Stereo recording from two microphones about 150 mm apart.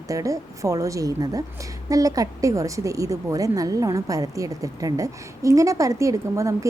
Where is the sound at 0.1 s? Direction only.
20° right (ahead or behind).